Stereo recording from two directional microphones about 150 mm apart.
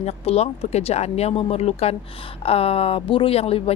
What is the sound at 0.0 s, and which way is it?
A woman's voice, 45° left (ahead or behind).